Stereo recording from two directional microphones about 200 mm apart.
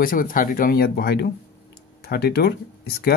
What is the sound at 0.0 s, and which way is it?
Speech, 45° left (ahead or behind).